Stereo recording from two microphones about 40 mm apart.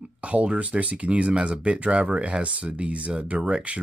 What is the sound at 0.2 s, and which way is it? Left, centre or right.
Speech, right.